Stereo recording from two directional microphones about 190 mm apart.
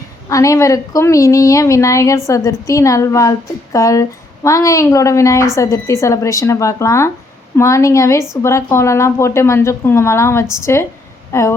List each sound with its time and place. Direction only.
0.3 s a woman's voice: 15° left (ahead or behind)